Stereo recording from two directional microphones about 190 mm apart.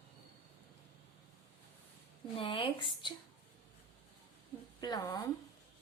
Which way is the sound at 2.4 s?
30° left (ahead or behind).